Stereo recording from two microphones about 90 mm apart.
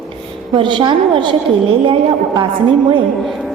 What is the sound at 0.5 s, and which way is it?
Speech, 60° right (ahead or behind).